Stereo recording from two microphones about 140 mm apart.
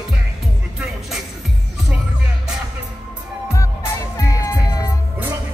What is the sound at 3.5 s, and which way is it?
Music, 20° left (ahead or behind).